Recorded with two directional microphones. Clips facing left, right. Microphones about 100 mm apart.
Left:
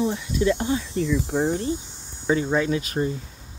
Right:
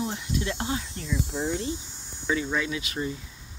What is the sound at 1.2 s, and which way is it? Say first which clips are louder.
Speech: left 7 dB; 75° left (ahead or behind).